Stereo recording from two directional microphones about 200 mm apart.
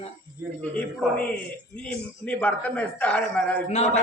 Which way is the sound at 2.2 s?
5° left (ahead or behind).